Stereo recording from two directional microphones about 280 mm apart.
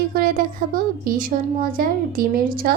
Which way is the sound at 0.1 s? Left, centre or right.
Right.